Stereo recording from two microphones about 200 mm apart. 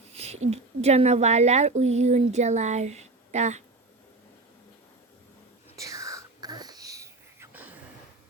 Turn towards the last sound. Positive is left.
turn(degrees=-10)  # may be behind; listen again after turning